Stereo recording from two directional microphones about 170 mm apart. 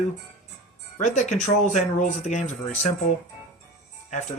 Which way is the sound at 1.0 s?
45° left (ahead or behind).